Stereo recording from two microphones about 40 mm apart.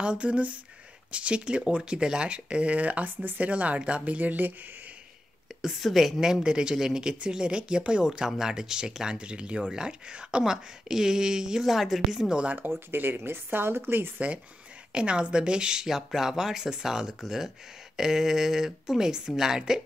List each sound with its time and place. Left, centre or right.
0.0 s speech: right
5.6 s a woman's voice: centre
6.4 s speech: right
11.6 s speech: centre
12.9 s speech: right
13.5 s speech: right
14.9 s speech: right